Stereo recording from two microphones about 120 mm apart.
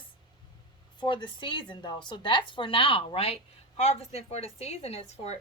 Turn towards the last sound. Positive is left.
turn(degrees=60)  # may be behind; listen again after turning